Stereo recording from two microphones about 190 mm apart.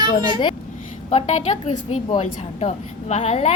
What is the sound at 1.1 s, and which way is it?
A woman's voice, 40° left (ahead or behind).